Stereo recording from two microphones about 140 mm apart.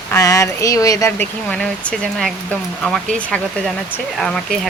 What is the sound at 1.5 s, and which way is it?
Speech, 5° left (ahead or behind).